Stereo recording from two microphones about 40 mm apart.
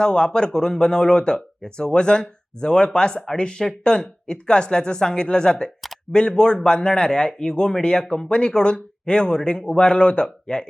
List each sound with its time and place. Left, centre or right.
0.0 s speech: left